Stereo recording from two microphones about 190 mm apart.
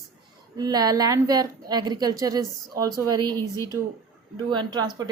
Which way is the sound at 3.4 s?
15° left (ahead or behind).